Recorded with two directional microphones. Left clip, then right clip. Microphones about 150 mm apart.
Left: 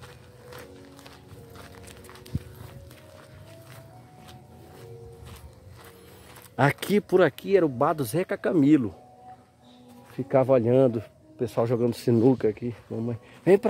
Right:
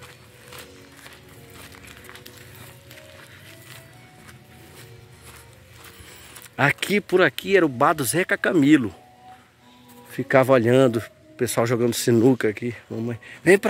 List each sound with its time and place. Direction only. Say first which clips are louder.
6.5 s speech: right 3 dB; 20° left (ahead or behind)
7.4 s speech: right 4 dB; centre (ahead or behind)
10.1 s speech: right 4 dB; 15° right (ahead or behind); by 13.7 s centre (ahead or behind)